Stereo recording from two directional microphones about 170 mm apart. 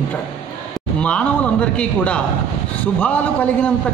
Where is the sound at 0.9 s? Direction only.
5° left (ahead or behind).